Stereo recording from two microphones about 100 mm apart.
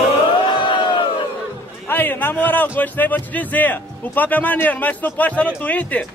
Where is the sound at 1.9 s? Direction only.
20° left (ahead or behind).